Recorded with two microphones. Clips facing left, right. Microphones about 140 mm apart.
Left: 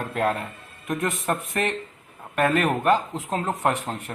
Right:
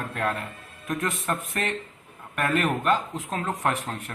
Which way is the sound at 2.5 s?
45° left (ahead or behind).